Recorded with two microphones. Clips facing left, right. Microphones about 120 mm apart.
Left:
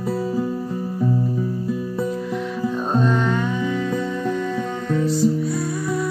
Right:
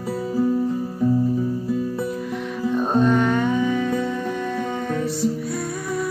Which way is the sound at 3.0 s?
55° right (ahead or behind).